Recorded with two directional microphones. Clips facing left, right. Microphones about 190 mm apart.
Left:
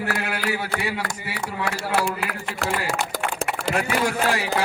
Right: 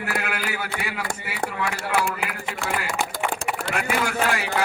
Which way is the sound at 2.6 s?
35° left (ahead or behind).